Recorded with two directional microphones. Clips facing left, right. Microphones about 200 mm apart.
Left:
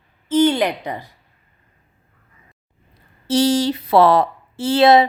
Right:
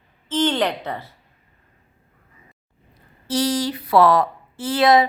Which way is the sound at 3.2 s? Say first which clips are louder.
Left 5 dB; 25° left (ahead or behind).